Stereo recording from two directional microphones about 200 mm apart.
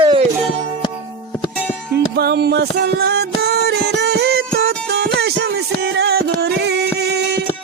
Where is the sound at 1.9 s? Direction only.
55° right (ahead or behind).